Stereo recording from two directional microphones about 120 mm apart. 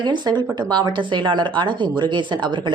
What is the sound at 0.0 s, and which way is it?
Speech, 40° right (ahead or behind).